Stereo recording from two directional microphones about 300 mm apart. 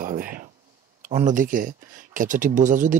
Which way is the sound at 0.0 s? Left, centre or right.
Right.